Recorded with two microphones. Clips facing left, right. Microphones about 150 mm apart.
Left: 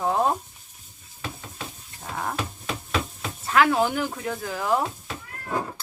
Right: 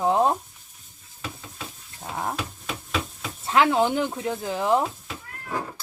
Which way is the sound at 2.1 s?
20° right (ahead or behind).